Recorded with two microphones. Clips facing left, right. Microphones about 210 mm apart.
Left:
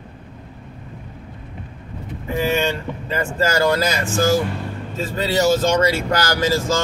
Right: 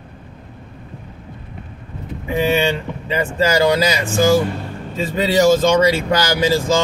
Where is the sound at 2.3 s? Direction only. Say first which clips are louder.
Right 3 dB; 20° right (ahead or behind).